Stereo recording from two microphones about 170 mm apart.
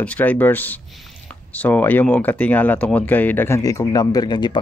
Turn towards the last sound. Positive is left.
turn(degrees=25)  # may be behind; listen again after turning